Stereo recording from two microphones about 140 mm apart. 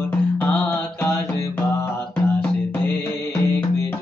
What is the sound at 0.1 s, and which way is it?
Music, 15° left (ahead or behind).